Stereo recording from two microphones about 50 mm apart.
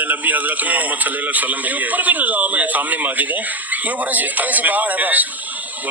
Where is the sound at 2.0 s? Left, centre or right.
Right.